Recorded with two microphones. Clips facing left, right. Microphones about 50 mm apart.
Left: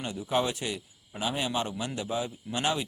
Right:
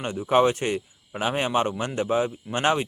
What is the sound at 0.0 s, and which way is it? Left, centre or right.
Speech, right.